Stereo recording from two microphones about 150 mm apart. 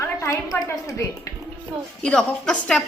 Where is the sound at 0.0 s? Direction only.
20° left (ahead or behind).